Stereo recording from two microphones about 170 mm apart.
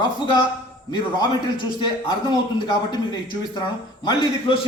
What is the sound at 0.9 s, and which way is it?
A man's voice, 25° left (ahead or behind).